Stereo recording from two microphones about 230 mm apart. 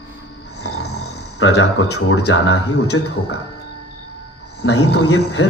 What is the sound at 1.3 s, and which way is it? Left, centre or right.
Speech, left.